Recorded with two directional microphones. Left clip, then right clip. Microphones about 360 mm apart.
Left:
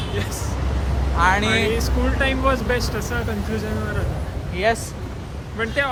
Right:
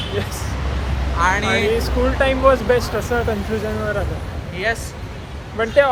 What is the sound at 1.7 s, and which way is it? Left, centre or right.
Speech, centre.